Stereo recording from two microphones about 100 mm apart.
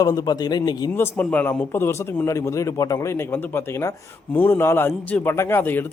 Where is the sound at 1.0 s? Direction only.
15° left (ahead or behind).